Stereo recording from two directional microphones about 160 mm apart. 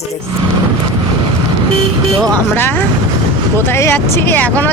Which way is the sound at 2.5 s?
15° left (ahead or behind).